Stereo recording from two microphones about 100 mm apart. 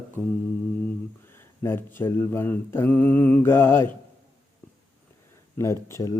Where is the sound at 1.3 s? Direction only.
25° left (ahead or behind).